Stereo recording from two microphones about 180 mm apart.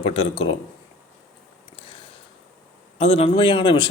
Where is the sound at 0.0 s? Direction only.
30° left (ahead or behind).